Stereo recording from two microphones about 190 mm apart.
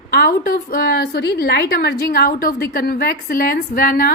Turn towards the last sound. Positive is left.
turn(degrees=45)  # may be behind; listen again after turning